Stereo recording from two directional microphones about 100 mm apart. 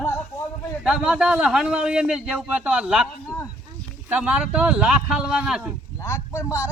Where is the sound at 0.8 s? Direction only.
5° right (ahead or behind).